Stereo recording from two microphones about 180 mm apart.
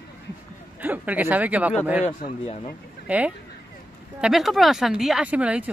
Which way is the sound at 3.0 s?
5° right (ahead or behind).